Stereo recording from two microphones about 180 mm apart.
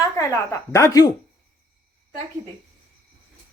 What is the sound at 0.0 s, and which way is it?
A woman's voice, 15° left (ahead or behind).